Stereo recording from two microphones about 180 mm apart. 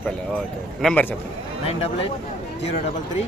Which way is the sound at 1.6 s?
35° left (ahead or behind).